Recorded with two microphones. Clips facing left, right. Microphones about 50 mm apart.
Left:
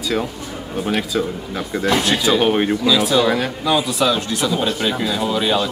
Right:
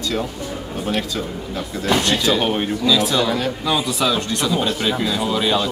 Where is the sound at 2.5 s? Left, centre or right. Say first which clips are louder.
Left 2 dB; centre.